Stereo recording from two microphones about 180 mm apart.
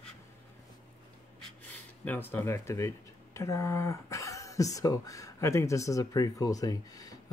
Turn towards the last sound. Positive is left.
turn(degrees=20)  # may be behind; listen again after turning